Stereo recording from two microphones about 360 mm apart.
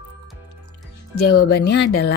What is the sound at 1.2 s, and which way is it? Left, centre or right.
Speech, left.